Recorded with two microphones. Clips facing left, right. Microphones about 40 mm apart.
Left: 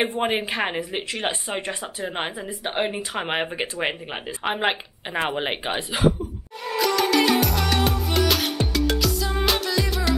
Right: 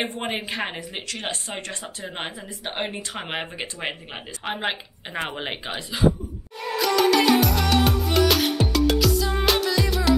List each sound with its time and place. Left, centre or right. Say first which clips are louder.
0.2 s speech: left 4 dB; centre
5.3 s speech: left 5 dB; centre
5.7 s speech: left 4 dB; left
6.8 s music: right 1 dB; centre